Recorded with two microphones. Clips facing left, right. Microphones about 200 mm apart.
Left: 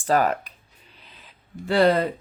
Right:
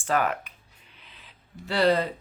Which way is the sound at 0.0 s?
35° left (ahead or behind).